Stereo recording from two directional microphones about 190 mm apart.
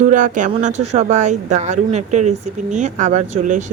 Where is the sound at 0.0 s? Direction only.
40° right (ahead or behind).